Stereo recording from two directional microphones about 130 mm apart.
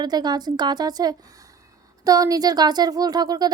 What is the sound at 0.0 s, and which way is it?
A woman's voice, 30° right (ahead or behind).